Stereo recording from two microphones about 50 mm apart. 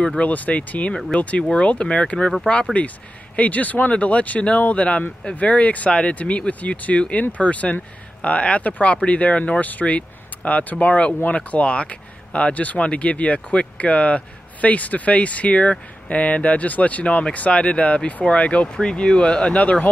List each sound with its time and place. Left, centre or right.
0.2 s speech: left
2.8 s speech: left